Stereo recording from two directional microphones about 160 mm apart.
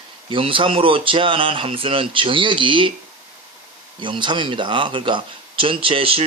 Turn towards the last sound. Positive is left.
turn(degrees=-35)  # may be behind; listen again after turning